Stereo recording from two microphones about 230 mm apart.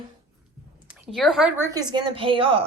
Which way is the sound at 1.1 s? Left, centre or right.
Centre.